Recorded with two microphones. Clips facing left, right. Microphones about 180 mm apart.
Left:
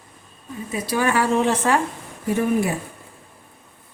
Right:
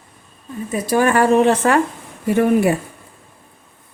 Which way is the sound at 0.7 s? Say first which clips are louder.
Right 5 dB; 50° right (ahead or behind).